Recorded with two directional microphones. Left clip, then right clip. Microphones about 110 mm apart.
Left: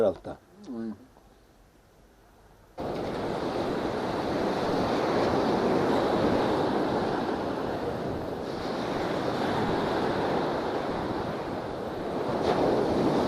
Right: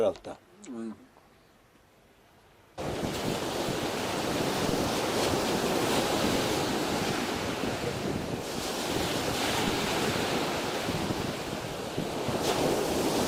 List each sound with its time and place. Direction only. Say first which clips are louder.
2.7 s waves: left 1 dB; 15° right (ahead or behind)